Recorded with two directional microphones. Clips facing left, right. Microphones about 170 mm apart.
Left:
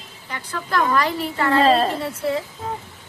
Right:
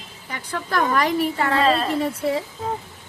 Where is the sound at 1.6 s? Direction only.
35° left (ahead or behind).